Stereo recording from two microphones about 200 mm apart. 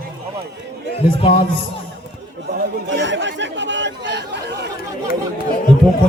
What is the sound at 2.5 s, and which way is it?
Chatter, 65° right (ahead or behind).